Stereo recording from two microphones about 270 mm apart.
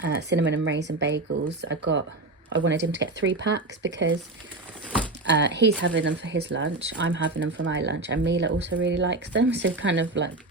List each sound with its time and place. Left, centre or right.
0.0 s speech: right
5.2 s speech: right